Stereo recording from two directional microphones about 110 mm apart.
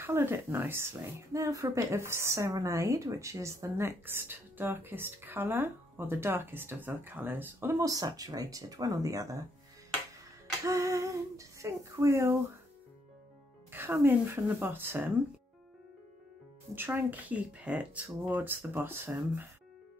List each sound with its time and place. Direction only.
0.0 s speech: 20° right (ahead or behind)
7.8 s speech: 35° right (ahead or behind)
10.6 s speech: 30° right (ahead or behind)
13.7 s speech: 20° right (ahead or behind)
16.7 s speech: 20° right (ahead or behind)